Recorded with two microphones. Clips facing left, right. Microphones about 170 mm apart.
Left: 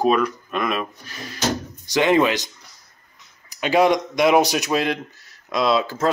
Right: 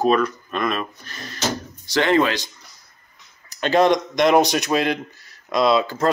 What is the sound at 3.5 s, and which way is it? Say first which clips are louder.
Speech: even; 10° left (ahead or behind).